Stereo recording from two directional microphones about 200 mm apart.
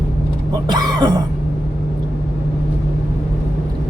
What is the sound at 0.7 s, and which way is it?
Speech, 20° right (ahead or behind).